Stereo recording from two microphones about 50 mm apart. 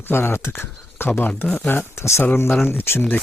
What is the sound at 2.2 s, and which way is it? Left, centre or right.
Speech, left.